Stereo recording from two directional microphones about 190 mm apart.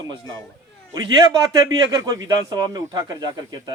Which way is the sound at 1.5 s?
25° right (ahead or behind).